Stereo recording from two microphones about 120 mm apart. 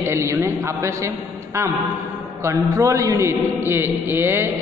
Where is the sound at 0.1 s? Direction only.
20° right (ahead or behind).